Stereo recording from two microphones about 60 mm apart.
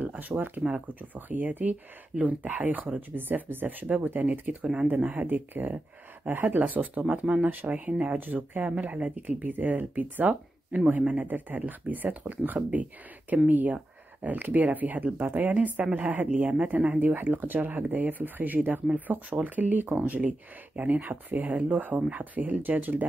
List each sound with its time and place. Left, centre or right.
0.0 s speech: right